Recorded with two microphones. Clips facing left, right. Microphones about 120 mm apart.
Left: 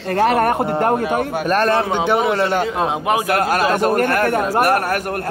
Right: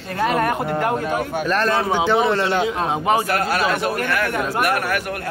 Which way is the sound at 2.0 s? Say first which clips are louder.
Left 1 dB; 10° left (ahead or behind).